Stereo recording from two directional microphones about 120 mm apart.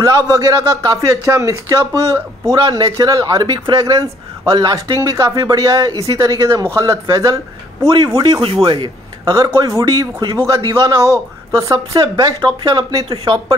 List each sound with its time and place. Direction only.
0.0 s speech: 25° right (ahead or behind)
8.6 s speech: 40° right (ahead or behind)
12.2 s speech: 35° right (ahead or behind)
13.1 s speech: 50° right (ahead or behind)